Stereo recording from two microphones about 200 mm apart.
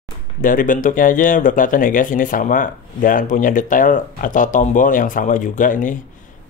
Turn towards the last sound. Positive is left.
turn(degrees=40)  # may be behind; listen again after turning